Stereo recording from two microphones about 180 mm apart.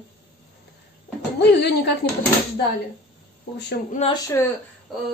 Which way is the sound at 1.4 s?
65° left (ahead or behind).